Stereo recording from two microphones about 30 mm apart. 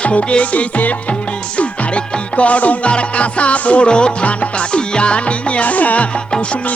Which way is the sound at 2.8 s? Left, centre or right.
Left.